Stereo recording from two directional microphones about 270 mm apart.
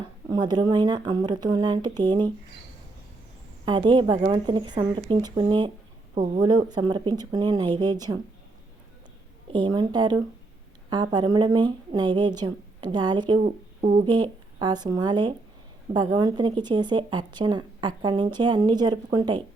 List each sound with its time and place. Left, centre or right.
0.3 s a woman's voice: centre
3.7 s a woman's voice: centre
9.5 s a woman's voice: centre